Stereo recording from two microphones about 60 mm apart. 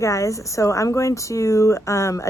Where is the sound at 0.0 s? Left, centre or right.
Left.